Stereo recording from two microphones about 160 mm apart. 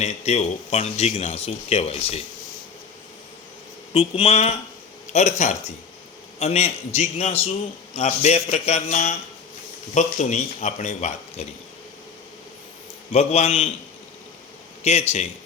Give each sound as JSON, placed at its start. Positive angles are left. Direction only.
{"t": 0.0, "sound": "speech", "side_deg": 40}
{"t": 3.9, "sound": "speech", "side_deg": 35}
{"t": 13.1, "sound": "speech", "side_deg": 40}
{"t": 14.8, "sound": "speech", "side_deg": 40}